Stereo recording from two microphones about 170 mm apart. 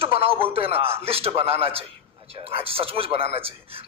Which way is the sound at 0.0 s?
35° right (ahead or behind).